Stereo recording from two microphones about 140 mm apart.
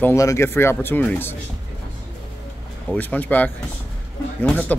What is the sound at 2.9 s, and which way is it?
Speech, 10° left (ahead or behind).